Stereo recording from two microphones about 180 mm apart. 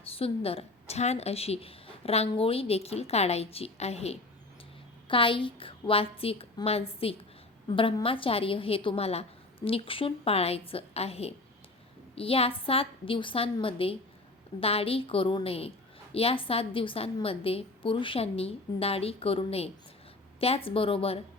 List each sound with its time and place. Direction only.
0.1 s a woman's voice: 30° left (ahead or behind)